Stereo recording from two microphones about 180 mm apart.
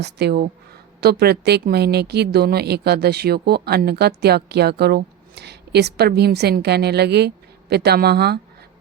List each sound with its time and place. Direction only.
0.0 s speech: 65° right (ahead or behind)